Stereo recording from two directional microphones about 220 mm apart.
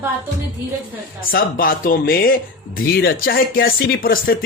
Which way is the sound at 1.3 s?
40° left (ahead or behind).